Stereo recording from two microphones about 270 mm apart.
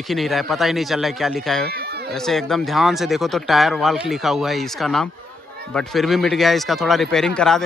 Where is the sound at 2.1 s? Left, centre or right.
Centre.